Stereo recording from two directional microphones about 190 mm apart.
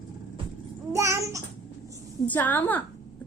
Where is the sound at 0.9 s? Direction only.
15° right (ahead or behind).